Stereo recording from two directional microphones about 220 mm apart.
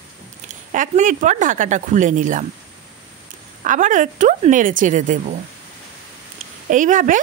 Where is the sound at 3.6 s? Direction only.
35° right (ahead or behind).